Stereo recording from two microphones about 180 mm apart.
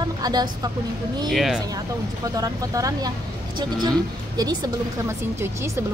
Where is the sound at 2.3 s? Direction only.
20° right (ahead or behind).